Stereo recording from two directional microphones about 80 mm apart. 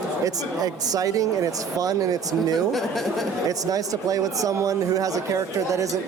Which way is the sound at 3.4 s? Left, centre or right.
Right.